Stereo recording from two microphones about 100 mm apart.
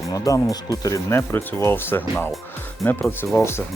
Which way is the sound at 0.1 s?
35° left (ahead or behind).